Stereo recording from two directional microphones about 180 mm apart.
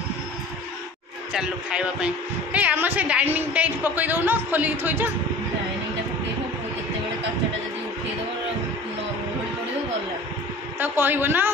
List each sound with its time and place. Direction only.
1.3 s a woman's voice: 5° right (ahead or behind)
10.8 s a woman's voice: 10° right (ahead or behind)